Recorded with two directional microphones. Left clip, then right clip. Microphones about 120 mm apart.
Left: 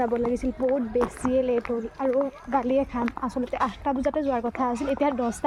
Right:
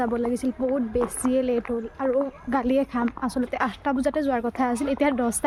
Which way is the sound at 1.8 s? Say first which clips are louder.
Even; 20° right (ahead or behind).